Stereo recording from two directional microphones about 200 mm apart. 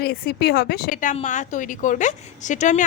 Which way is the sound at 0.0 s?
50° left (ahead or behind).